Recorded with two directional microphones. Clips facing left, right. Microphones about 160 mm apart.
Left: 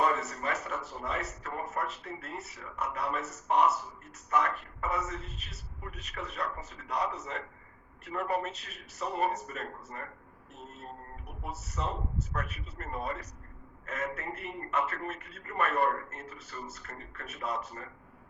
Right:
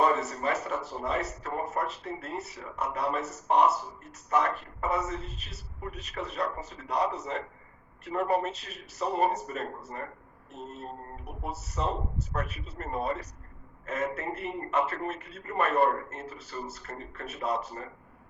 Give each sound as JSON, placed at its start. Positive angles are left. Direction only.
{"t": 0.0, "sound": "a man's voice", "side_deg": -30}